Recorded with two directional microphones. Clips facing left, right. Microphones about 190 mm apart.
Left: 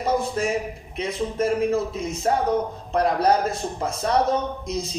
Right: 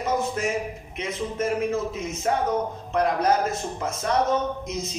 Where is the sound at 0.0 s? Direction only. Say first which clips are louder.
Left 2 dB; 35° left (ahead or behind).